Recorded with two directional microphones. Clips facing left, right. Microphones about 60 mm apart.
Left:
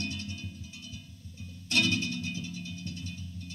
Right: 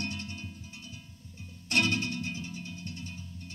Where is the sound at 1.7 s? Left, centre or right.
Right.